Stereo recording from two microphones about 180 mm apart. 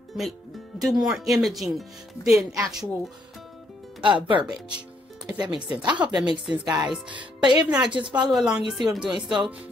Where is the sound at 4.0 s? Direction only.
25° right (ahead or behind).